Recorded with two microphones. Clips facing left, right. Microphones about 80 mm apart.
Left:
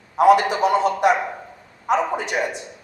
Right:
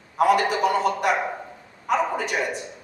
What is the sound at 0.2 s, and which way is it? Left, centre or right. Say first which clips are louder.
Speech: left 4 dB; left.